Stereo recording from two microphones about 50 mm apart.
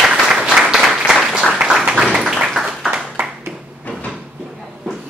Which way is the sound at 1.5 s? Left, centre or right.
Centre.